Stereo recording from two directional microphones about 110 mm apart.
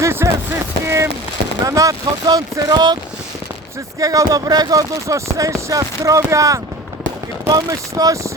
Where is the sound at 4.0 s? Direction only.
30° right (ahead or behind).